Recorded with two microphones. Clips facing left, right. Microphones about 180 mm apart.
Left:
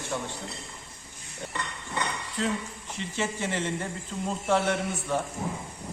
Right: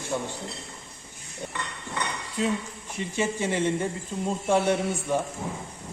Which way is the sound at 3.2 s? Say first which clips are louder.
Right 4 dB; 15° right (ahead or behind).